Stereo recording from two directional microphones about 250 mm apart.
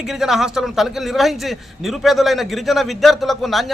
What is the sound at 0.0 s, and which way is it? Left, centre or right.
A man's voice, centre.